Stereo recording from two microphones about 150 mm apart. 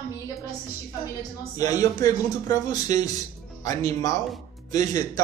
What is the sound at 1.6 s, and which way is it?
Speech, 25° left (ahead or behind).